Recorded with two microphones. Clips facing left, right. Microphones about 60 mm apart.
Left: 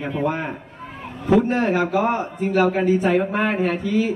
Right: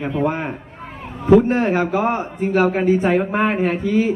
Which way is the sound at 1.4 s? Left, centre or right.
Right.